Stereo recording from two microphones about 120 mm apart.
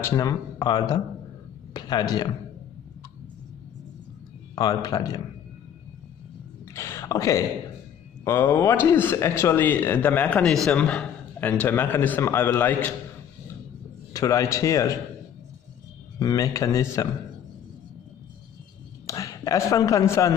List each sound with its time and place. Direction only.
0.0 s speech: 30° left (ahead or behind)
4.6 s speech: 35° left (ahead or behind)
6.7 s a sound: 25° left (ahead or behind)
8.2 s a man's voice: 20° left (ahead or behind)
14.1 s speech: 25° left (ahead or behind)
16.2 s speech: 30° left (ahead or behind)
19.0 s speech: 30° left (ahead or behind)